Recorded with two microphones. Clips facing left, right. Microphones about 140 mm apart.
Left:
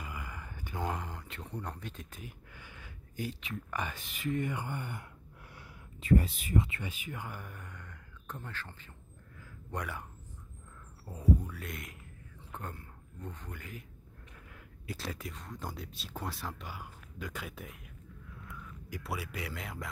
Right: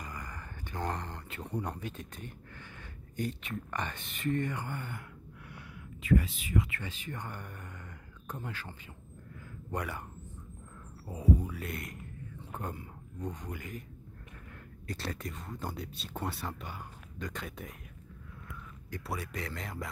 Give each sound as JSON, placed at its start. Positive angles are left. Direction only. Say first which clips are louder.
{"t": 0.0, "sound": "a sound", "louder": "even", "side_deg": 10}
{"t": 1.4, "sound": "speech", "louder": "right 5 dB", "side_deg": -10}
{"t": 4.5, "sound": "speech", "louder": "even", "side_deg": 15}
{"t": 6.0, "sound": "speech", "louder": "left 1 dB", "side_deg": 40}
{"t": 6.8, "sound": "speech", "louder": "even", "side_deg": 10}
{"t": 11.1, "sound": "speech", "louder": "right 1 dB", "side_deg": -10}
{"t": 12.5, "sound": "speech", "louder": "right 3 dB", "side_deg": -10}
{"t": 14.9, "sound": "speech", "louder": "right 2 dB", "side_deg": 0}
{"t": 18.9, "sound": "speech", "louder": "right 1 dB", "side_deg": 5}